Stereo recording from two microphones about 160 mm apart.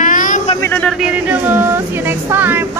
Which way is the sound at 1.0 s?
10° right (ahead or behind).